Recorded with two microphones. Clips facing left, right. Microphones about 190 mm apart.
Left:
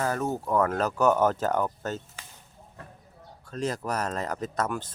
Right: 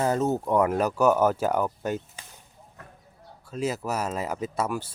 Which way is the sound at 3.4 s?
5° right (ahead or behind).